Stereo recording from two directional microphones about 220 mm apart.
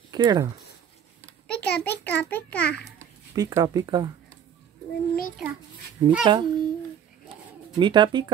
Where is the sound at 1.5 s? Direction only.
45° left (ahead or behind).